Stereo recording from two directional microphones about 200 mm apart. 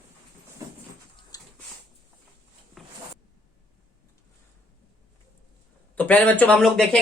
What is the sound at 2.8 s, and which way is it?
Zipper, centre (ahead or behind).